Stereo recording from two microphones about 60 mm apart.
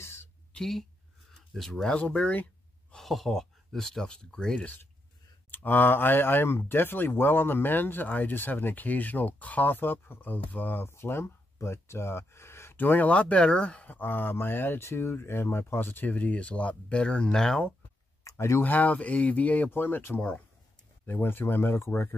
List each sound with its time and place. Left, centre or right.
0.0 s a sound: left
0.6 s speech: centre
2.0 s speech: left
2.9 s speech: centre
5.5 s speech: left; by 17.7 s centre
18.6 s speech: left
19.7 s speech: left
20.2 s speech: left
21.0 s speech: left